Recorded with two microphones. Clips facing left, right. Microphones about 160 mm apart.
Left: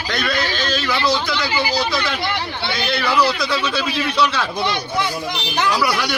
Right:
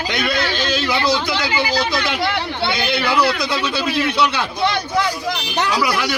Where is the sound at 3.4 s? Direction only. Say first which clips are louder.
Even; 10° right (ahead or behind).